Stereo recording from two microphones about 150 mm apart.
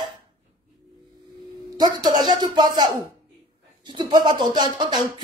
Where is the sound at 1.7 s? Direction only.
30° right (ahead or behind).